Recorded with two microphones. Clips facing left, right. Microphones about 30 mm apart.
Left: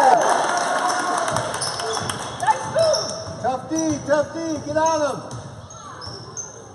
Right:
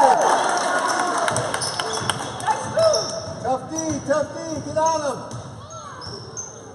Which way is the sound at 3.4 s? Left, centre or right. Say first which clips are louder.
Left 3 dB; centre.